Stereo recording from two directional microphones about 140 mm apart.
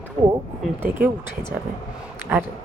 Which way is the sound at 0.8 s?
15° right (ahead or behind).